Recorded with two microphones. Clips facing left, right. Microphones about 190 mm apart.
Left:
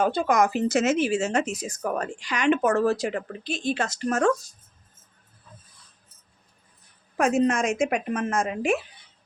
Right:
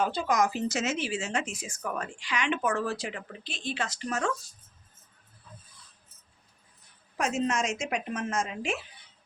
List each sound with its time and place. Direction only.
0.0 s speech: 50° left (ahead or behind)
7.2 s a woman's voice: 55° left (ahead or behind)